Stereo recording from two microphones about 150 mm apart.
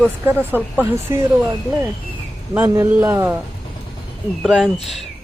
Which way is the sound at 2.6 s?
15° right (ahead or behind).